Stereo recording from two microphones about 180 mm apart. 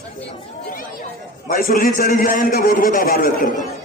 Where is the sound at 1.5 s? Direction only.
55° left (ahead or behind).